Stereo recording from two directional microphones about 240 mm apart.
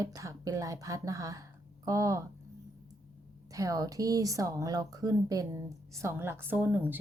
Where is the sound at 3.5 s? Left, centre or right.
Centre.